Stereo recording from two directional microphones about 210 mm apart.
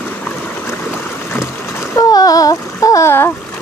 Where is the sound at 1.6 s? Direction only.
10° left (ahead or behind).